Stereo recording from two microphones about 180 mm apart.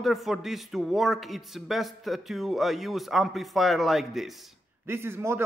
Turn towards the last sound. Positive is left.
turn(degrees=-15)  # may be behind; listen again after turning